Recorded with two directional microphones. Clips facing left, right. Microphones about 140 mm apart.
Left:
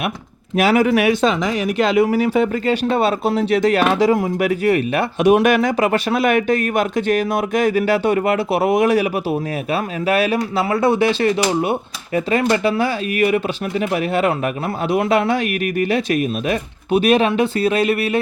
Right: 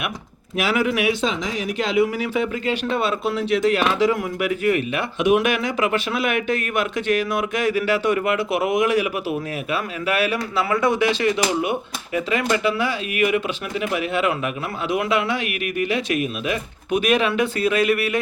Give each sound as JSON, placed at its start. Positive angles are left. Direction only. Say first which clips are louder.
{"t": 0.5, "sound": "speech", "louder": "left 6 dB", "side_deg": 45}